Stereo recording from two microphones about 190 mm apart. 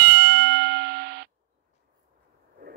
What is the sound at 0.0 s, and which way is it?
Ding, 55° right (ahead or behind).